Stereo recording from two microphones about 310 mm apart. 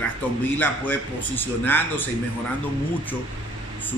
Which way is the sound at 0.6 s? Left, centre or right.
Centre.